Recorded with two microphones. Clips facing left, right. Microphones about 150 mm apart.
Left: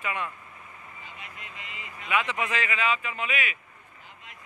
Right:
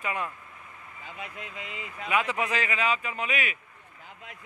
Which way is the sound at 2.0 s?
40° right (ahead or behind).